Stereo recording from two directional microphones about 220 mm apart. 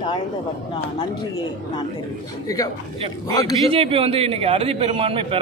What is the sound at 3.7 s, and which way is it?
A man's voice, 25° right (ahead or behind).